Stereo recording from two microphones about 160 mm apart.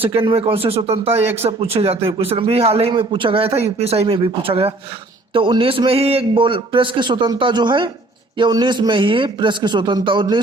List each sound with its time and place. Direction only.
0.0 s a man's voice: 35° right (ahead or behind)